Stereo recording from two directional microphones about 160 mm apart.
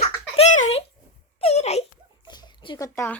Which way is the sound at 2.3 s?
25° left (ahead or behind).